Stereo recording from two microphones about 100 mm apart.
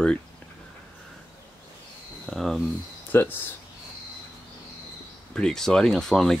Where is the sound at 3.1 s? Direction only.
20° left (ahead or behind).